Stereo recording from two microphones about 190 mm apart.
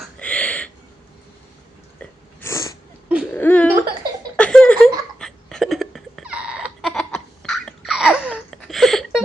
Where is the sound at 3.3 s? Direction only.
10° left (ahead or behind).